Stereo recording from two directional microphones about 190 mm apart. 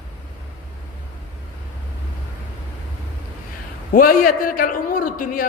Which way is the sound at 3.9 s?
50° left (ahead or behind).